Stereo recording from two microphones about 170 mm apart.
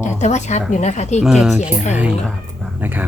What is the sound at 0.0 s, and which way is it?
Speech, 45° left (ahead or behind).